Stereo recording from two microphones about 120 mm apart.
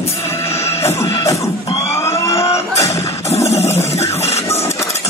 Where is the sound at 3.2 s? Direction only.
60° left (ahead or behind).